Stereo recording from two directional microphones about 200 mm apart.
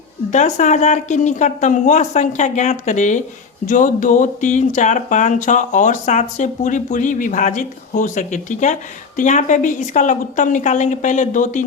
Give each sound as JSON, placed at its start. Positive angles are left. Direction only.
{"t": 0.3, "sound": "speech", "side_deg": 35}